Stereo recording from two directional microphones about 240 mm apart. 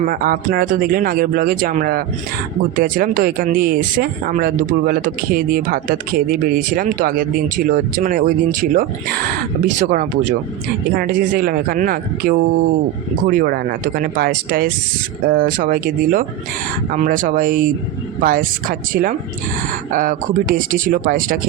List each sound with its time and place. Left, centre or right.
0.0 s speech: right